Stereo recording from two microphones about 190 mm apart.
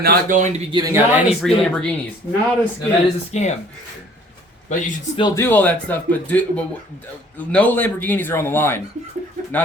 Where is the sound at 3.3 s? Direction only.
35° left (ahead or behind).